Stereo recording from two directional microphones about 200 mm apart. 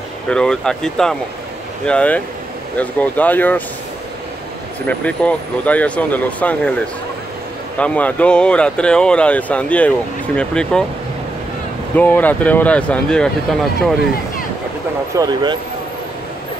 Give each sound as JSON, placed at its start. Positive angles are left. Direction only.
{"t": 0.3, "sound": "speech", "side_deg": 5}
{"t": 4.8, "sound": "speech", "side_deg": 5}
{"t": 7.8, "sound": "speech", "side_deg": 5}
{"t": 12.0, "sound": "speech", "side_deg": 10}
{"t": 15.1, "sound": "speech", "side_deg": -20}